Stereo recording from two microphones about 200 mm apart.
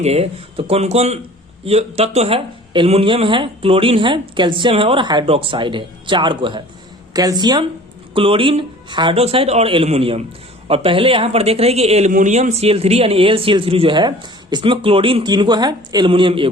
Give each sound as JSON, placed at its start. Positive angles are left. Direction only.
{"t": 0.0, "sound": "speech", "side_deg": -30}